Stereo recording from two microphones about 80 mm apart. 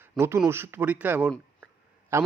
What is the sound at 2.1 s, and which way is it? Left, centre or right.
Speech, right.